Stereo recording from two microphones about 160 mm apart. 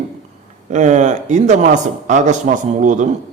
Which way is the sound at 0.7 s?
50° right (ahead or behind).